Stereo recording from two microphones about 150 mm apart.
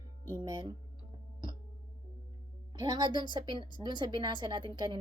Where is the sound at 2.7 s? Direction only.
30° right (ahead or behind).